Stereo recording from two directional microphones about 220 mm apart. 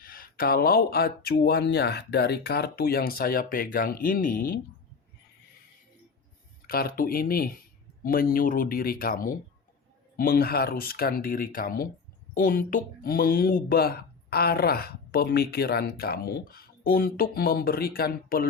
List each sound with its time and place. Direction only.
0.0 s speech: 40° left (ahead or behind)
6.7 s speech: 45° left (ahead or behind)